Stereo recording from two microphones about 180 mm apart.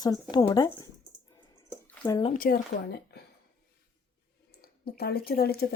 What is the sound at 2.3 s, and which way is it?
Speech, 55° left (ahead or behind).